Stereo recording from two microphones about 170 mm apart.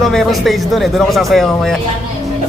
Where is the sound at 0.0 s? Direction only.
Centre (ahead or behind).